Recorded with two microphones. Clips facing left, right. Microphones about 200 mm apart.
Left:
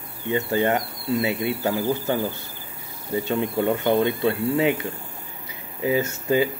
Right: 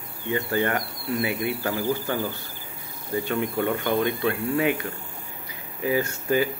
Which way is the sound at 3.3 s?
25° left (ahead or behind).